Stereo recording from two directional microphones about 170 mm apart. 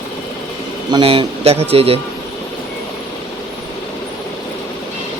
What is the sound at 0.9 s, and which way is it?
Speech, 30° right (ahead or behind).